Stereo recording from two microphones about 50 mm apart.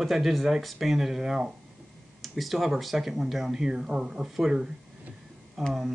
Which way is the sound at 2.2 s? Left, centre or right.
Centre.